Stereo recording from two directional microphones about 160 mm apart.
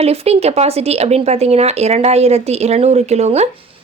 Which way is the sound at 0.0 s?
40° right (ahead or behind).